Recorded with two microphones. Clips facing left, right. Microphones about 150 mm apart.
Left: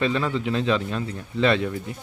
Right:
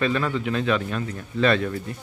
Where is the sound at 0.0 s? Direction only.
20° left (ahead or behind).